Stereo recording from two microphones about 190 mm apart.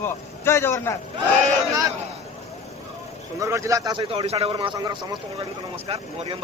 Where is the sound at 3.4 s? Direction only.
15° right (ahead or behind).